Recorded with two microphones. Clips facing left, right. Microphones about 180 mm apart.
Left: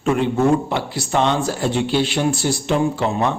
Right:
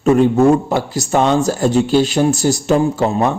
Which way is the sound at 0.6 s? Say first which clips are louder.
Right 5 dB; 40° right (ahead or behind).